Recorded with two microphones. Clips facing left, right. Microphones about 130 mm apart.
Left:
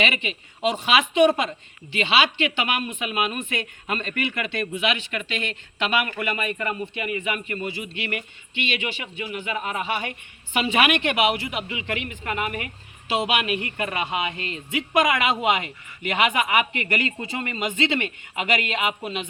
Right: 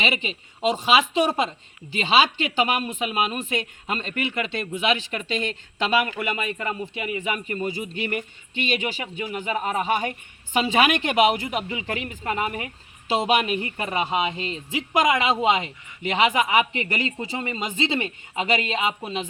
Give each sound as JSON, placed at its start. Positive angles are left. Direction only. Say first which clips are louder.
{"t": 0.0, "sound": "speech", "louder": "left 1 dB", "side_deg": -30}
{"t": 6.1, "sound": "speech", "louder": "even", "side_deg": -20}
{"t": 7.2, "sound": "speech", "louder": "right 1 dB", "side_deg": -35}